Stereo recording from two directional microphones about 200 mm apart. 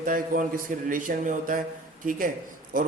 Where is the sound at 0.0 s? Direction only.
45° right (ahead or behind).